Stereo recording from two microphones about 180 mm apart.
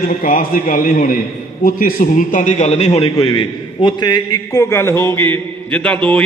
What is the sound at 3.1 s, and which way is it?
A man's voice, 25° left (ahead or behind).